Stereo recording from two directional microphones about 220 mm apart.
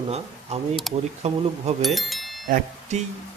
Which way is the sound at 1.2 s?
30° right (ahead or behind).